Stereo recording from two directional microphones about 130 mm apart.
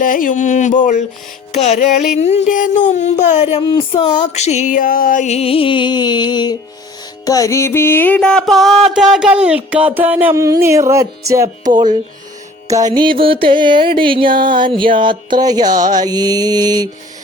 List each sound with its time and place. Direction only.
0.0 s music: 90° left; by 1.0 s 70° left (ahead or behind)
1.5 s music: 60° left (ahead or behind)
3.6 s a sound: 40° left (ahead or behind)
4.1 s music: 65° left (ahead or behind); by 10.3 s 15° right (ahead or behind)
10.3 s music: 25° right (ahead or behind)
13.0 s mantra: 40° right (ahead or behind)